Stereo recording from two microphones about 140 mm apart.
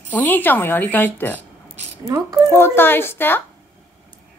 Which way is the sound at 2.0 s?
25° right (ahead or behind).